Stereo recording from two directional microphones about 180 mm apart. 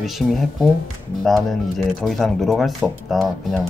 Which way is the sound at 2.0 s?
Centre (ahead or behind).